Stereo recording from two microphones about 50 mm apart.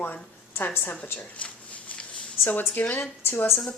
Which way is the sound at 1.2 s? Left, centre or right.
Left.